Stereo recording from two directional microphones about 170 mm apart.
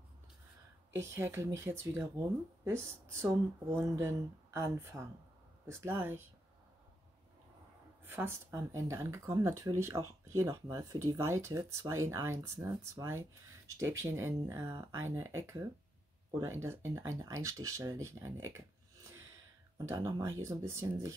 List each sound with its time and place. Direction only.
0.9 s speech: 15° right (ahead or behind)
8.0 s speech: 10° right (ahead or behind)
19.9 s speech: 20° right (ahead or behind)